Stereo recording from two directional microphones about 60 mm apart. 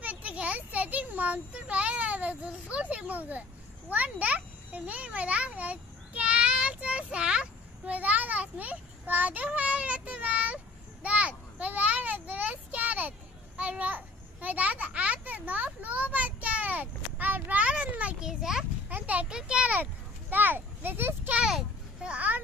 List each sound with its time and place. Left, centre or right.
0.0 s a child's voice: right
18.3 s a child's voice: centre
18.9 s a child's voice: right
20.2 s speech: right
21.4 s a child's voice: centre
22.0 s a child's voice: right